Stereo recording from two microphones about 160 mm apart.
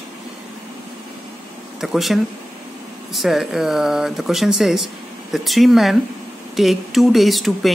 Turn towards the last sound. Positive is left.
turn(degrees=0)  # may be behind; listen again after turning